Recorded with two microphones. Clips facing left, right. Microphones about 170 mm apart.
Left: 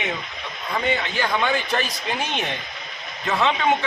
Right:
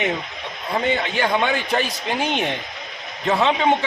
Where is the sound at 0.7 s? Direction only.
25° right (ahead or behind).